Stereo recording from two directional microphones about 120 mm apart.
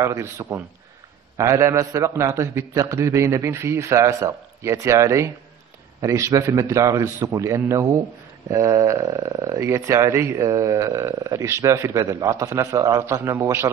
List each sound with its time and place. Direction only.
0.0 s speech: 25° right (ahead or behind)